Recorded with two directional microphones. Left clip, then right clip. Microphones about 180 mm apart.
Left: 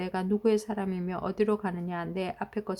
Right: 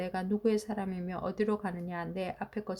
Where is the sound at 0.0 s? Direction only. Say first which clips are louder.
Left 4 dB; 20° left (ahead or behind).